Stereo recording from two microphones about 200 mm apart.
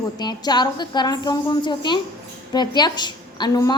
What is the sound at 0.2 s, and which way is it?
A woman's voice, 20° left (ahead or behind).